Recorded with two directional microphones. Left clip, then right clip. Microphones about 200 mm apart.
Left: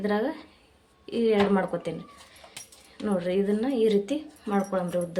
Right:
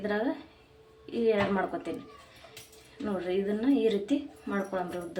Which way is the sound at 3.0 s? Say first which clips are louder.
Left 4 dB; 50° left (ahead or behind).